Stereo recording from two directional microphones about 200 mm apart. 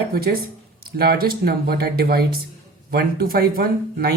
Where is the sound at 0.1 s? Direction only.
50° right (ahead or behind).